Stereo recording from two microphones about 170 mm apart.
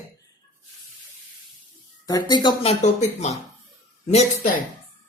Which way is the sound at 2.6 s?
45° left (ahead or behind).